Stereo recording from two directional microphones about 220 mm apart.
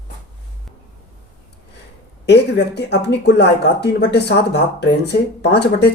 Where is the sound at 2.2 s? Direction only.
50° left (ahead or behind).